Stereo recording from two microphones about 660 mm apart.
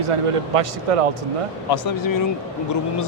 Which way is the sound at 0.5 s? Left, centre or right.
Right.